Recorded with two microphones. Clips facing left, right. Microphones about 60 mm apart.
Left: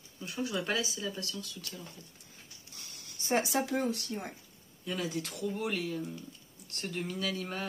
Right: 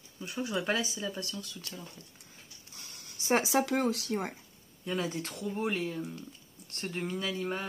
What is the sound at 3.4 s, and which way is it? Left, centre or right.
Speech, right.